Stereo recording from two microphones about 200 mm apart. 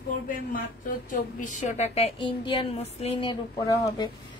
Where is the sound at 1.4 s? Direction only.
40° left (ahead or behind).